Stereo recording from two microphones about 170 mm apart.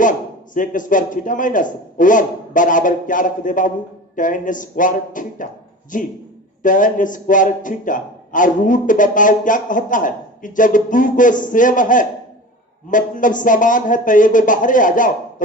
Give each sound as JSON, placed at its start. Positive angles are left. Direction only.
{"t": 0.0, "sound": "a man's voice", "side_deg": 50}